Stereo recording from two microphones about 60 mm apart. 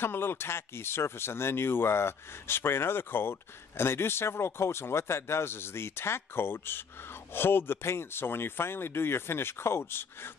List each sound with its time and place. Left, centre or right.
0.0 s speech: left